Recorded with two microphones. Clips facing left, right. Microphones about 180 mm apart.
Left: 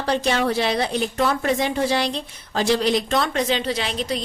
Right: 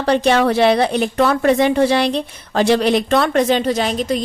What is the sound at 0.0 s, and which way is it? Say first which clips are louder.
A woman's voice: right 6 dB; 65° right (ahead or behind).